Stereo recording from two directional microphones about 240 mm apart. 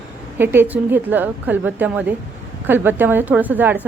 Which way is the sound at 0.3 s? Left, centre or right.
Centre.